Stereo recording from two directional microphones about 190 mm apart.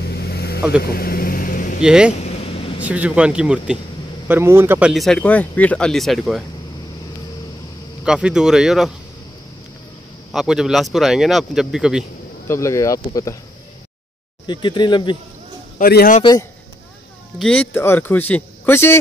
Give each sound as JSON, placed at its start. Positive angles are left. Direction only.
{"t": 0.0, "sound": "vehicle", "side_deg": 60}
{"t": 1.8, "sound": "speech", "side_deg": -5}
{"t": 2.1, "sound": "a sound", "side_deg": 35}
{"t": 2.8, "sound": "speech", "side_deg": -5}
{"t": 8.0, "sound": "speech", "side_deg": -5}
{"t": 10.3, "sound": "speech", "side_deg": -5}
{"t": 12.4, "sound": "speech", "side_deg": 15}
{"t": 14.4, "sound": "speech", "side_deg": 25}
{"t": 15.8, "sound": "a man's voice", "side_deg": 50}
{"t": 16.2, "sound": "speech", "side_deg": 20}
{"t": 17.4, "sound": "speech", "side_deg": 5}